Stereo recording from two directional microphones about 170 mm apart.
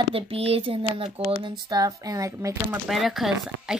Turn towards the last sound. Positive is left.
turn(degrees=0)  # may be behind; listen again after turning